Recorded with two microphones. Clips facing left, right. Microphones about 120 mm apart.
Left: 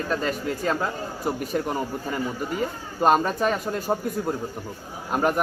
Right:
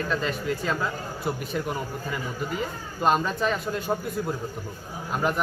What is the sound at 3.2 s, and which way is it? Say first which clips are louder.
A man's voice: left 2 dB; 45° left (ahead or behind).